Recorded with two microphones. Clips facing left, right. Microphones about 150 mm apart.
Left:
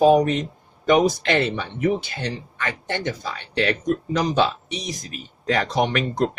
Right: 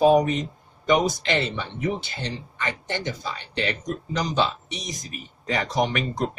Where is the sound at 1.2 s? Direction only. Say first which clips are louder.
Left 4 dB; 55° left (ahead or behind).